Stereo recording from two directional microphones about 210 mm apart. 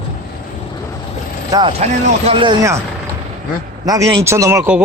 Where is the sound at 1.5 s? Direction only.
25° right (ahead or behind).